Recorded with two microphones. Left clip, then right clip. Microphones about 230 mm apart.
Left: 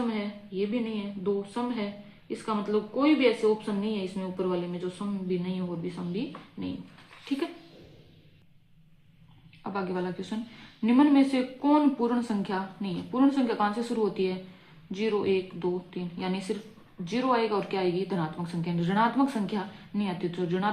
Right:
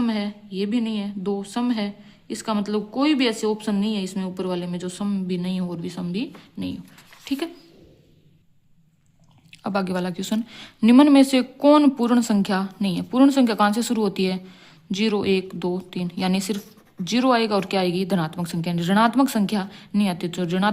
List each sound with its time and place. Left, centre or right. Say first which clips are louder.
0.1 s speech: right 5 dB; right
9.6 s speech: right 7 dB; right